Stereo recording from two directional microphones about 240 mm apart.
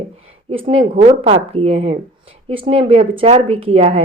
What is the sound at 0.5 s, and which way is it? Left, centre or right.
Speech, right.